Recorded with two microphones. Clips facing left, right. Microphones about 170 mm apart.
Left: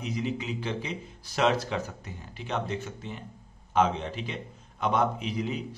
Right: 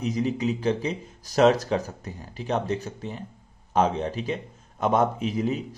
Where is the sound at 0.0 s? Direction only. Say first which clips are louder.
Right 6 dB; 40° right (ahead or behind).